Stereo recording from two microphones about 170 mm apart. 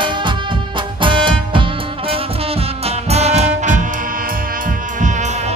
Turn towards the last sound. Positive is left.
turn(degrees=-40)  # may be behind; listen again after turning